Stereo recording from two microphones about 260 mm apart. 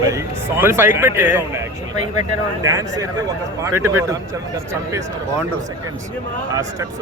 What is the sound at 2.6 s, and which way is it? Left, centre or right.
A man's voice, centre.